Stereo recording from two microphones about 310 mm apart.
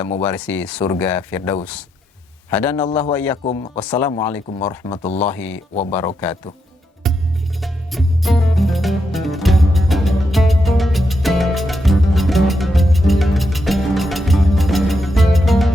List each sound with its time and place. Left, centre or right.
0.0 s speech: centre
3.4 s speech: left
3.8 s speech: centre
7.0 s music: centre